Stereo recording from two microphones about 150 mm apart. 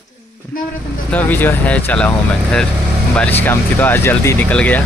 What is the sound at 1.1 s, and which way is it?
Speech, 10° left (ahead or behind).